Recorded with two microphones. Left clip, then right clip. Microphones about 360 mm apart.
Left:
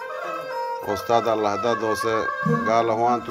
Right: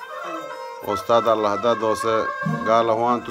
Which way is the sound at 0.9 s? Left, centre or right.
Centre.